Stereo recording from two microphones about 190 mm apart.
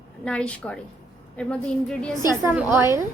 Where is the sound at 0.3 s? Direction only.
5° left (ahead or behind).